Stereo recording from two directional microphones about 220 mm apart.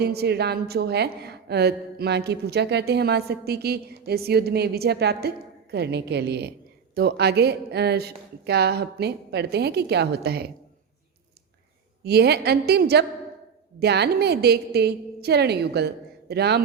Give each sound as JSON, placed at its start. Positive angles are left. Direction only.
{"t": 0.0, "sound": "a woman's voice", "side_deg": -45}
{"t": 12.0, "sound": "a woman's voice", "side_deg": -45}